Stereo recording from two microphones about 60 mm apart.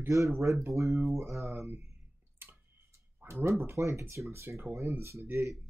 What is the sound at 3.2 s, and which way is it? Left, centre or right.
Speech, right.